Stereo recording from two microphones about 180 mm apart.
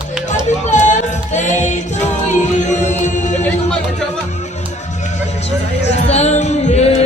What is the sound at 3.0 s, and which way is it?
Music, 45° left (ahead or behind).